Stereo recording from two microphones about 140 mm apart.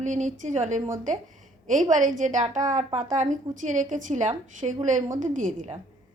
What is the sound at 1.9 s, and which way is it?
A woman's voice, 65° right (ahead or behind).